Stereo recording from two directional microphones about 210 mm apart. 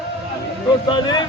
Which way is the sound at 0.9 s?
20° left (ahead or behind).